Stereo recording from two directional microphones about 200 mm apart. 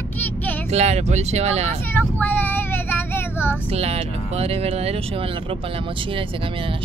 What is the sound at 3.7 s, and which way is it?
Speech, 30° right (ahead or behind).